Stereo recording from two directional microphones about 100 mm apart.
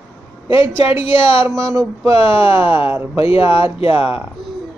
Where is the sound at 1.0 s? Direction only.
65° left (ahead or behind).